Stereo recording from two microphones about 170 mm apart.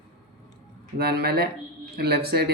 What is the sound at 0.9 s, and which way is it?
Speech, 65° right (ahead or behind).